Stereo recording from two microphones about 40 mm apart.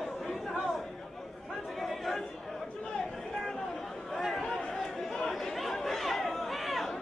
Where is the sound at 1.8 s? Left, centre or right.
Centre.